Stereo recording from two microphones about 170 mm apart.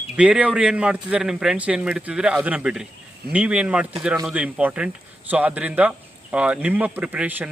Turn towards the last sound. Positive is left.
turn(degrees=-10)  # may be behind; listen again after turning